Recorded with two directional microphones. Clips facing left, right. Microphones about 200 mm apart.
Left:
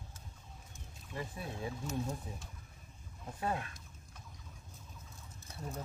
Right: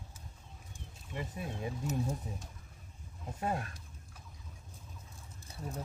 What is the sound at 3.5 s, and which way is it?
Speech, 45° right (ahead or behind).